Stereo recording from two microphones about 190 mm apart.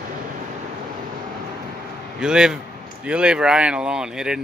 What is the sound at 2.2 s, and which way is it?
Speech, 5° right (ahead or behind).